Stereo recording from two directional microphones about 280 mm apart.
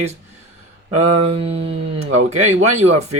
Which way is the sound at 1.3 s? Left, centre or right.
Right.